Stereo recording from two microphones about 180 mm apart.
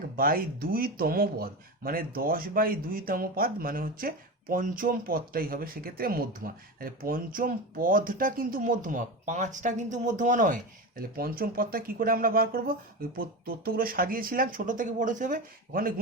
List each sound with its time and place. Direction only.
0.2 s speech: 55° right (ahead or behind)